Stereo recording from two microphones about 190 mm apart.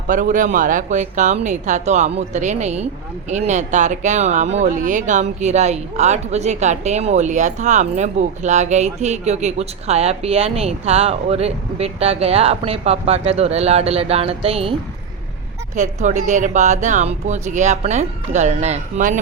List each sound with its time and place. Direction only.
0.1 s speech: 45° right (ahead or behind)